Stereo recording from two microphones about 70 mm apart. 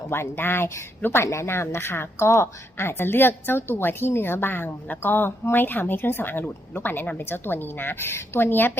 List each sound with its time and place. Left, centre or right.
0.1 s speech: left